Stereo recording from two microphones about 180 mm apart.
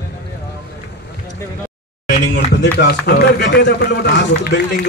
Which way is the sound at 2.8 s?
65° left (ahead or behind).